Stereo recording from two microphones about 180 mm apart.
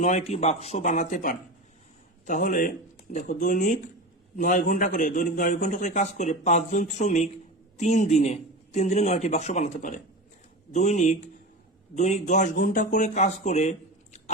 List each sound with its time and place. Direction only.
0.0 s a man's voice: 40° left (ahead or behind)